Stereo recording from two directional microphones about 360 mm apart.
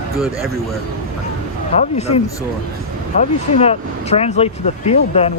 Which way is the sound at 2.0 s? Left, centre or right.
Centre.